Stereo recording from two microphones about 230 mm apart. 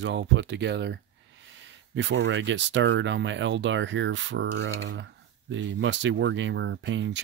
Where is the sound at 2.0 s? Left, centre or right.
Right.